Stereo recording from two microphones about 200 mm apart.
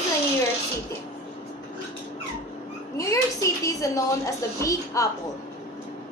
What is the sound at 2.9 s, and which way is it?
A woman's voice, 15° left (ahead or behind).